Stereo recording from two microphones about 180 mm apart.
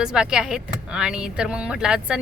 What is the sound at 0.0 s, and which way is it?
Speech, 5° right (ahead or behind).